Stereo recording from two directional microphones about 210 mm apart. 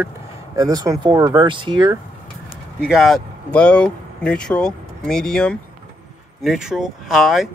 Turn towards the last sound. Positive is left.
turn(degrees=0)  # may be behind; listen again after turning